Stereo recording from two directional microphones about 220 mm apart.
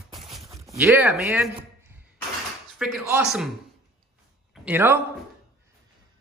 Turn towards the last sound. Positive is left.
turn(degrees=-10)  # may be behind; listen again after turning